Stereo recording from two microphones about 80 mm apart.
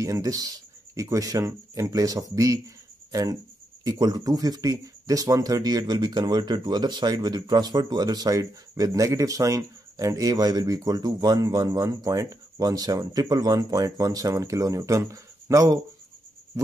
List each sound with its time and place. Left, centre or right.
0.0 s speech: right